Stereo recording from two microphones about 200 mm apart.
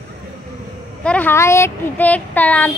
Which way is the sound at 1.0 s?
10° left (ahead or behind).